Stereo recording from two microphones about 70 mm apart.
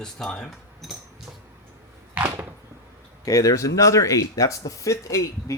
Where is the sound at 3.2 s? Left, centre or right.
Left.